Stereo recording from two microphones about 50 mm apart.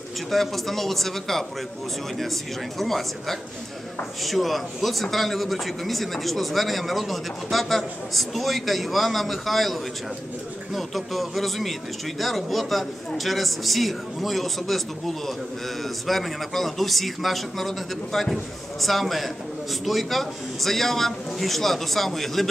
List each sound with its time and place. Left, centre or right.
0.3 s speech: centre
2.8 s speech: centre